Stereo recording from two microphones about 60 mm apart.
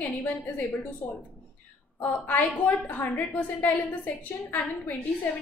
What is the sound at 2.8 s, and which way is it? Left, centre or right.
Speech, left.